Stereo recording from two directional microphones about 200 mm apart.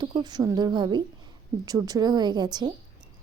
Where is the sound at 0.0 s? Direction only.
20° right (ahead or behind).